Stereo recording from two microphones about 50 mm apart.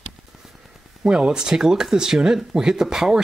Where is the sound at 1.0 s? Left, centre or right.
Centre.